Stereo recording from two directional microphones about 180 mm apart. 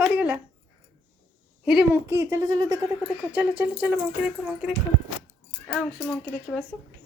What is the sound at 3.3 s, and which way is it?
Speech, 10° right (ahead or behind).